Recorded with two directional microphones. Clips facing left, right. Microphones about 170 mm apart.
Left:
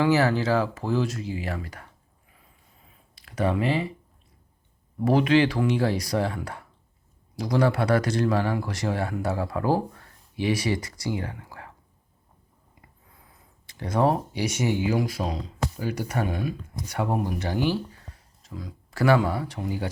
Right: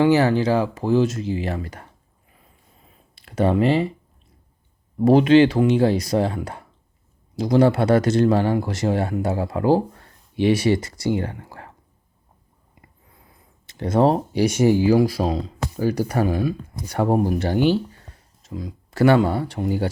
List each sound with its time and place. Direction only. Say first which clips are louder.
0.0 s speech: right 5 dB; 20° right (ahead or behind)
3.2 s speech: right 6 dB; 30° right (ahead or behind)
4.9 s speech: right 7 dB; 25° right (ahead or behind)
11.4 s whispering: right 3 dB; 30° right (ahead or behind)
13.7 s speech: right 5 dB; 25° right (ahead or behind)
17.7 s a sound: right 7 dB; 30° right (ahead or behind)